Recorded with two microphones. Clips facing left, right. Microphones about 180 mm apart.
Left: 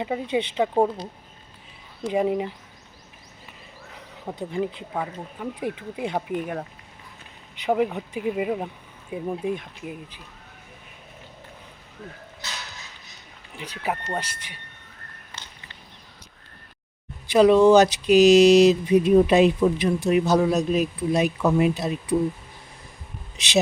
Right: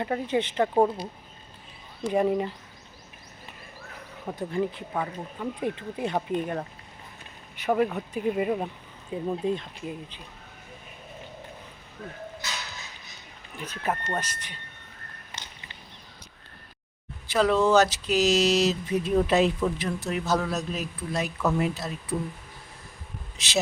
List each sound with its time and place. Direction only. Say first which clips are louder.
0.0 s speech: left 1 dB; 15° left (ahead or behind)
2.0 s speech: left 1 dB; 15° left (ahead or behind)
3.9 s speech: left 1 dB; 15° left (ahead or behind)
13.6 s speech: left 1 dB; 15° left (ahead or behind)
17.2 s speech: left 7 dB; 15° left (ahead or behind)